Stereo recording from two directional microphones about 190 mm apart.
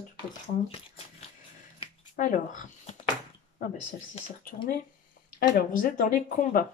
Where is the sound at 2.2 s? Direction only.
40° left (ahead or behind).